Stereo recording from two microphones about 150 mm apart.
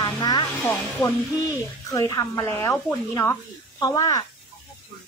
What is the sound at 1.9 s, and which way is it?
Speech, 25° left (ahead or behind).